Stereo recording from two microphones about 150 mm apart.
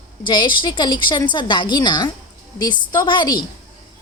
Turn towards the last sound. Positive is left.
turn(degrees=30)  # may be behind; listen again after turning